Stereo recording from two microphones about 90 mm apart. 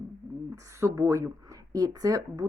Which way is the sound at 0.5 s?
35° right (ahead or behind).